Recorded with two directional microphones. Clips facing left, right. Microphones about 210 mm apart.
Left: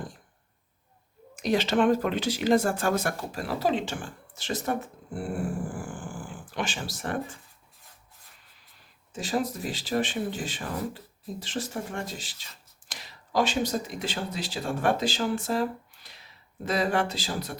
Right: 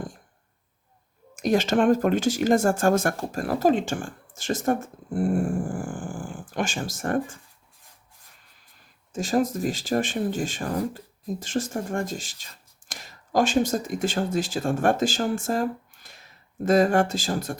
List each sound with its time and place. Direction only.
1.4 s speech: 45° right (ahead or behind)
8.8 s speech: 45° right (ahead or behind)